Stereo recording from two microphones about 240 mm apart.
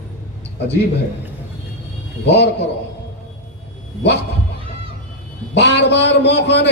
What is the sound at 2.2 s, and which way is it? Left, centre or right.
Speech, left.